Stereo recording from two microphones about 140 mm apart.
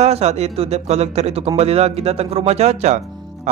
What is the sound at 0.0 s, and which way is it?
Speech, 50° right (ahead or behind).